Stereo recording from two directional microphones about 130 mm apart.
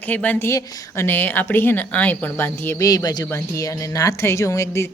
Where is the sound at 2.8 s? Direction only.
30° left (ahead or behind).